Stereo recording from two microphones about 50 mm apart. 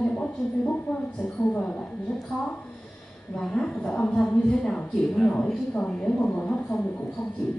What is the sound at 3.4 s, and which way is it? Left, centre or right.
A woman's voice, centre.